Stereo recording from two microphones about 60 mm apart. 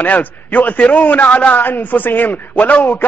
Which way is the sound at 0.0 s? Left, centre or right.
Left.